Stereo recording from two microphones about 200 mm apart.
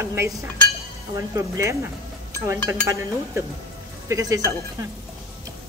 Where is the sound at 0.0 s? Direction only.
15° right (ahead or behind).